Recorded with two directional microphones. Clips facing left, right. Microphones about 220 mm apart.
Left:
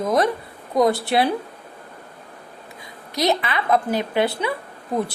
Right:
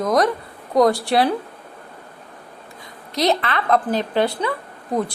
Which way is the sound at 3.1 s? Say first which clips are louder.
Right 1 dB; centre (ahead or behind).